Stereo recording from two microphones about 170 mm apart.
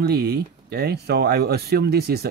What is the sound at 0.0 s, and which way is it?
Speech, 70° right (ahead or behind).